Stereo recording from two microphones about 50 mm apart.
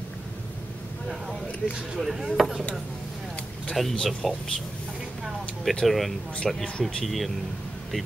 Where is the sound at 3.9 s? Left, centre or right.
Centre.